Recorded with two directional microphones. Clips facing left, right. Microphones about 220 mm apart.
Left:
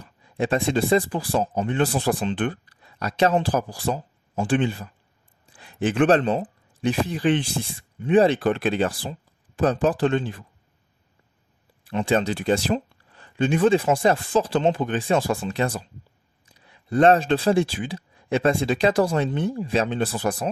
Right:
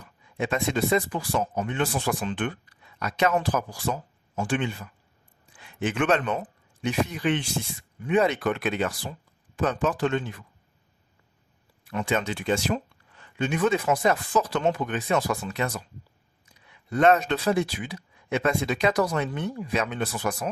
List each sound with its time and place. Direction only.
0.0 s speech: 35° left (ahead or behind)
11.8 s speech: 30° left (ahead or behind)